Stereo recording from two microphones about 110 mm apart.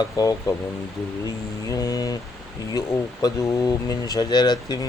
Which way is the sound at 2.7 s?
35° left (ahead or behind).